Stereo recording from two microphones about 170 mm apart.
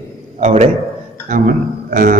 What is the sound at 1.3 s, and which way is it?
Speech, 55° right (ahead or behind).